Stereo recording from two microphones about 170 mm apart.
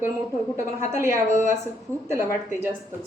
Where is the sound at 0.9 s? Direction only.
15° right (ahead or behind).